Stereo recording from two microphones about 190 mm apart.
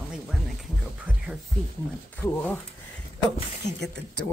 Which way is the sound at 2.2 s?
10° left (ahead or behind).